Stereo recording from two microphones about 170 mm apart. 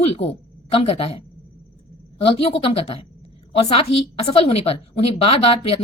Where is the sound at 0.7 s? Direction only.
35° left (ahead or behind).